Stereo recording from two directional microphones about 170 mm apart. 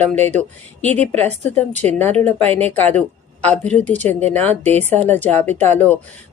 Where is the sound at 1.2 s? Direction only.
40° right (ahead or behind).